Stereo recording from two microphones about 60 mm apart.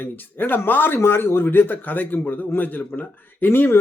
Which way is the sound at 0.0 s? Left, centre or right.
Left.